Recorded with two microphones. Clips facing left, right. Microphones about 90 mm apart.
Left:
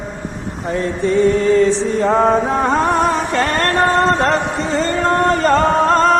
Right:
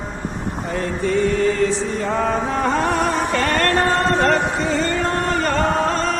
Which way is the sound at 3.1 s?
40° left (ahead or behind).